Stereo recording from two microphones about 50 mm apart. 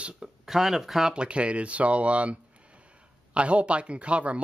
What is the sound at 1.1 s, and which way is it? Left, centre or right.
Speech, right.